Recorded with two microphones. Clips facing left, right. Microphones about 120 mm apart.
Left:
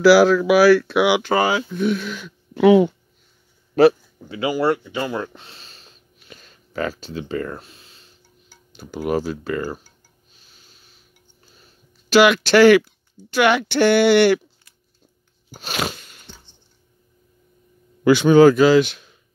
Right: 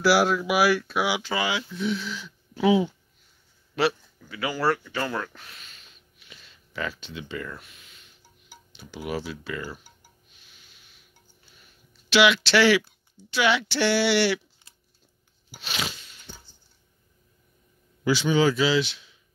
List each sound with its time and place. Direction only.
0.0 s speech: 90° left; by 2.9 s 65° left (ahead or behind)
3.8 s speech: 45° left (ahead or behind)
4.2 s speech: 25° left (ahead or behind)
8.7 s speech: 45° left (ahead or behind)
10.3 s a sound: 35° left (ahead or behind)
13.2 s speech: 50° left (ahead or behind)
15.5 s biting: 50° left (ahead or behind)
18.0 s speech: 55° left (ahead or behind)